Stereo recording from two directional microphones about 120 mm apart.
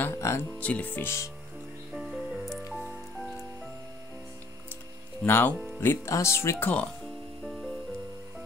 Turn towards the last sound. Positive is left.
turn(degrees=0)  # may be behind; listen again after turning